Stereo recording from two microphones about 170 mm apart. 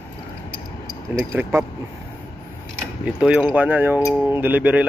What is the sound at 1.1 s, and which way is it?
Speech, 10° right (ahead or behind).